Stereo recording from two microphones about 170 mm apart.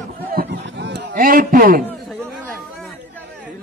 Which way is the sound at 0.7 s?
90° right.